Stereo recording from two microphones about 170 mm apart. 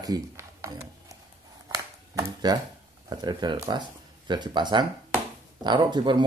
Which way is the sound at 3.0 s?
25° right (ahead or behind).